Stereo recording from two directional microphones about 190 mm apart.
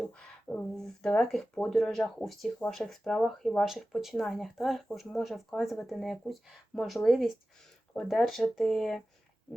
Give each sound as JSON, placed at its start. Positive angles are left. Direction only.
{"t": 0.0, "sound": "speech", "side_deg": 5}